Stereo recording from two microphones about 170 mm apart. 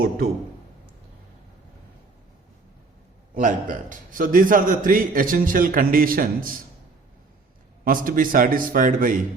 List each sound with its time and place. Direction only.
3.3 s a man's voice: 50° right (ahead or behind)
7.9 s a man's voice: 55° right (ahead or behind)